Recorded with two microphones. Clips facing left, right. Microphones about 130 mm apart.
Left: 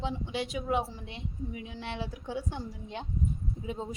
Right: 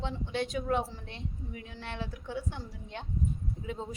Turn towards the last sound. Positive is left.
turn(degrees=15)  # may be behind; listen again after turning